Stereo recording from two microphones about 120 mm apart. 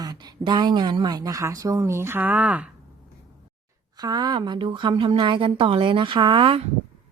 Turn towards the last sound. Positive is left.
turn(degrees=-45)  # may be behind; listen again after turning